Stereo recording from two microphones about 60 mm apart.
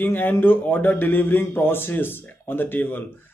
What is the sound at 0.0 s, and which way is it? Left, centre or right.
Speech, left.